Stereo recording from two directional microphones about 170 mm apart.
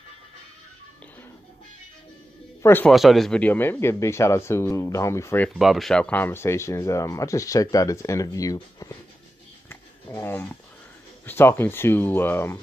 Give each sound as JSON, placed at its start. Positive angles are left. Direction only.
{"t": 2.6, "sound": "speech", "side_deg": 10}
{"t": 2.9, "sound": "speech", "side_deg": 0}
{"t": 5.5, "sound": "speech", "side_deg": 0}
{"t": 9.7, "sound": "a sound", "side_deg": 15}
{"t": 11.2, "sound": "speech", "side_deg": 15}